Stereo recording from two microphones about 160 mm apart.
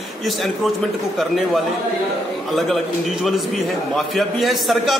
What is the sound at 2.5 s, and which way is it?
A man's voice, centre (ahead or behind).